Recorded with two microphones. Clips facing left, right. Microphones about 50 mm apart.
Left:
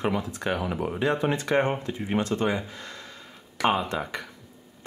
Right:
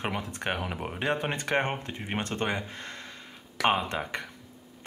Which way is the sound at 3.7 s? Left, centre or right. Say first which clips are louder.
Left 2 dB; right.